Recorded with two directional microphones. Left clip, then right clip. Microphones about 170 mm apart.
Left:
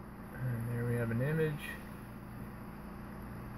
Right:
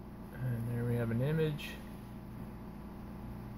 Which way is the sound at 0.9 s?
5° right (ahead or behind).